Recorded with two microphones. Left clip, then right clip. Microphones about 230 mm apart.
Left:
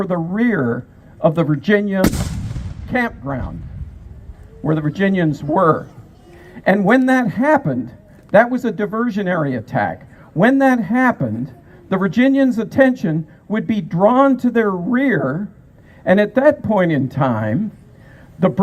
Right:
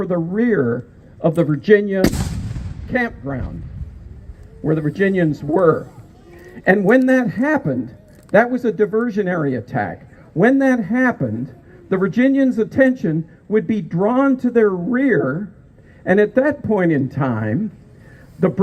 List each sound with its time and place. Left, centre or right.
0.0 s a man's voice: left
4.6 s a man's voice: left